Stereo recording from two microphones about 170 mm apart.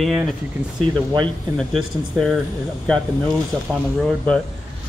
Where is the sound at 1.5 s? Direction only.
Centre (ahead or behind).